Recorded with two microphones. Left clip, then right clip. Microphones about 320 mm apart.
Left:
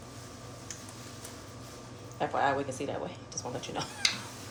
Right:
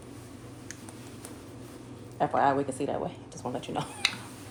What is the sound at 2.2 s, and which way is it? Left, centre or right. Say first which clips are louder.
Speech: right 4 dB; right.